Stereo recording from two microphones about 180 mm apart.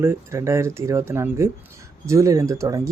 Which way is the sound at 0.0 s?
15° right (ahead or behind).